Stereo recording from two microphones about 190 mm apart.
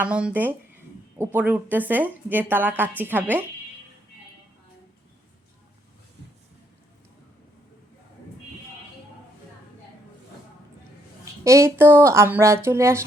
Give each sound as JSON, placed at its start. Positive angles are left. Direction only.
{"t": 0.0, "sound": "a woman's voice", "side_deg": -5}
{"t": 11.4, "sound": "a woman's voice", "side_deg": -15}